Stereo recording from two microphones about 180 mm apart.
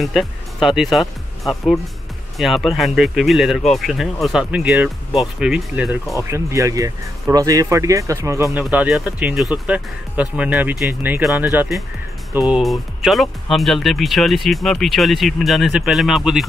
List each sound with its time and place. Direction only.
0.0 s speech: centre (ahead or behind)
6.3 s speech: 15° right (ahead or behind); by 16.4 s centre (ahead or behind)